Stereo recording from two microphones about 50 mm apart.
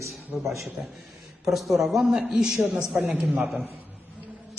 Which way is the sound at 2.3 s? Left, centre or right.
Centre.